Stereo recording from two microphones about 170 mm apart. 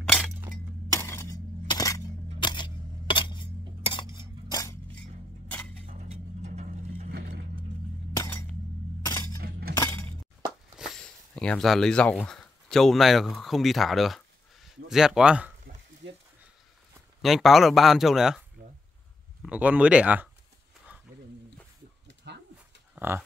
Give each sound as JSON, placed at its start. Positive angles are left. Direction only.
{"t": 0.8, "sound": "glass", "side_deg": 20}
{"t": 2.4, "sound": "coin", "side_deg": 25}
{"t": 3.8, "sound": "cutlery", "side_deg": 30}
{"t": 4.5, "sound": "a sound", "side_deg": 20}
{"t": 5.9, "sound": "music", "side_deg": -45}
{"t": 7.1, "sound": "vehicle", "side_deg": -65}
{"t": 8.1, "sound": "glass", "side_deg": 15}
{"t": 9.0, "sound": "a sound", "side_deg": 20}
{"t": 9.4, "sound": "chink", "side_deg": -60}
{"t": 10.8, "sound": "speech", "side_deg": 5}
{"t": 17.2, "sound": "speech", "side_deg": 0}
{"t": 19.4, "sound": "speech", "side_deg": -10}
{"t": 22.0, "sound": "a sound", "side_deg": -85}
{"t": 22.9, "sound": "speech", "side_deg": -10}